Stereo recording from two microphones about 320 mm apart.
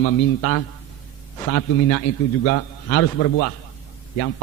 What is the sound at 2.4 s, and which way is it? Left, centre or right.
A man's voice, left.